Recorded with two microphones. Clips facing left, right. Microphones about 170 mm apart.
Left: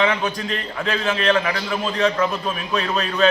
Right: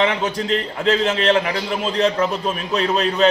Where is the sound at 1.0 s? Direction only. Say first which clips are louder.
Right 2 dB; 25° right (ahead or behind).